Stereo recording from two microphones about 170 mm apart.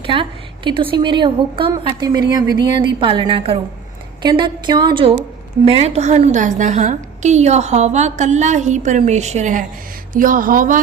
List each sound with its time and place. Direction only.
0.0 s a woman's voice: 30° right (ahead or behind); by 10.8 s 55° right (ahead or behind)